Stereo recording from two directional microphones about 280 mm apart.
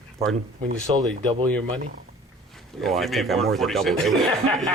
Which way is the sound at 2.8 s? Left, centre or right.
Centre.